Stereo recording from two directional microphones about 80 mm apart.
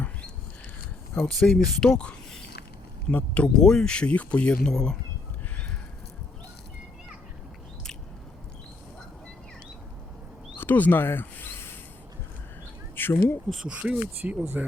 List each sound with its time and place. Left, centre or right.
1.2 s speech: centre
10.6 s speech: left
13.0 s speech: left
13.5 s speech: centre